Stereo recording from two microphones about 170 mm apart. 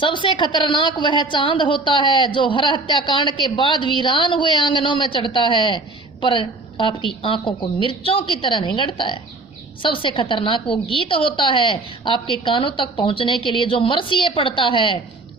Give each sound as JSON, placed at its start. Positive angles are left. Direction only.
{"t": 0.0, "sound": "a woman's voice", "side_deg": 30}